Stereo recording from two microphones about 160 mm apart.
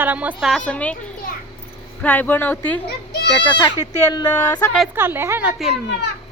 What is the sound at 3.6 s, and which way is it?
A woman's voice, 25° left (ahead or behind).